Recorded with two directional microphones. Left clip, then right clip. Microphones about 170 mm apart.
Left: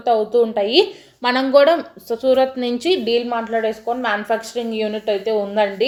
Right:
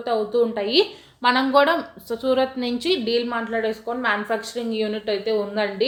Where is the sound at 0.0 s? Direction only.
25° left (ahead or behind).